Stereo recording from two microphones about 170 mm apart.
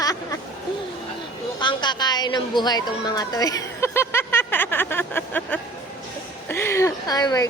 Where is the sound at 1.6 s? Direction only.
25° left (ahead or behind).